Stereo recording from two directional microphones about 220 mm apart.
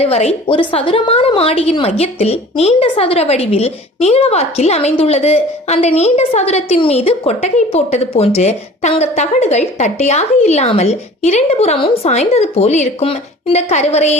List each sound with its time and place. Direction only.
0.0 s a woman's voice: 30° left (ahead or behind)